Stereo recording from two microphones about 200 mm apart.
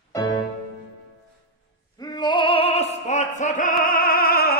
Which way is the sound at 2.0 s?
20° left (ahead or behind).